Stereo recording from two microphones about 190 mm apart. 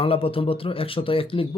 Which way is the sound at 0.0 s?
30° left (ahead or behind).